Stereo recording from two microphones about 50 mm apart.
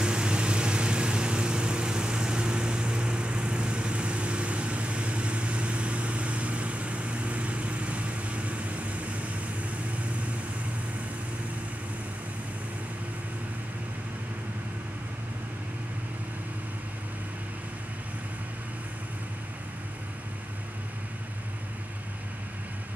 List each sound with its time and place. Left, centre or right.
0.0 s vehicle: centre